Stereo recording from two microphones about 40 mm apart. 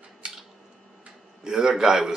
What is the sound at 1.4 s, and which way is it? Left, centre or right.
Speech, centre.